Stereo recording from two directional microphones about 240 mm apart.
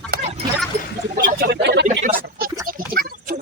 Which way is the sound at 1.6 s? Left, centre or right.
Right.